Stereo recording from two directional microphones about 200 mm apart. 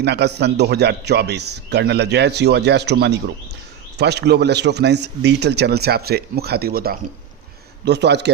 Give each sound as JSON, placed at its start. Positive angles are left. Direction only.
{"t": 0.0, "sound": "a man's voice", "side_deg": -55}